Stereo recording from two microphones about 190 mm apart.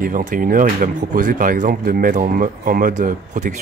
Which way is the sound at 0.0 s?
45° right (ahead or behind).